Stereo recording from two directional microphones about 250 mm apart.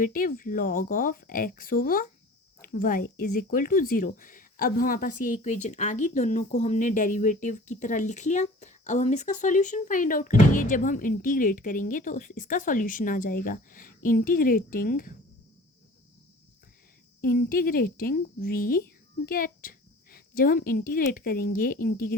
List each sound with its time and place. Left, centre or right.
0.0 s speech: left
17.2 s a child's voice: left